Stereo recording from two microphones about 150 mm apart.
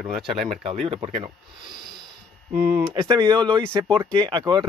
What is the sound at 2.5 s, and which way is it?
Speech, 15° right (ahead or behind).